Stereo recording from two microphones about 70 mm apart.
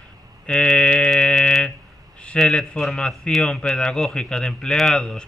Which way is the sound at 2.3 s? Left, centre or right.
Centre.